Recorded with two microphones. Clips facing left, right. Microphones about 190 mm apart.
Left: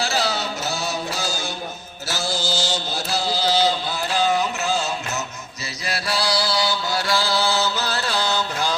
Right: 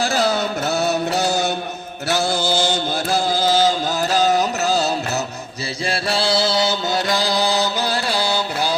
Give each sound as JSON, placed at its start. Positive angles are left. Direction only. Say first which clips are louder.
{"t": 0.0, "sound": "music", "louder": "right 5 dB", "side_deg": -50}
{"t": 2.0, "sound": "chant", "louder": "right 6 dB", "side_deg": -60}
{"t": 5.8, "sound": "music", "louder": "right 4 dB", "side_deg": -30}